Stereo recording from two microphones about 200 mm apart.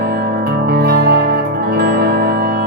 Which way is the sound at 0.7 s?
50° right (ahead or behind).